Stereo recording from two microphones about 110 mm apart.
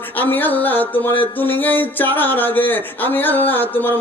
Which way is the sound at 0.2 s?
15° left (ahead or behind).